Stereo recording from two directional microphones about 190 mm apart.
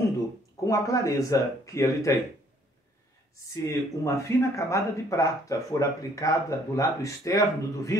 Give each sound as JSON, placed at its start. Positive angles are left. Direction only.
{"t": 0.7, "sound": "speech", "side_deg": 15}
{"t": 3.6, "sound": "speech", "side_deg": 15}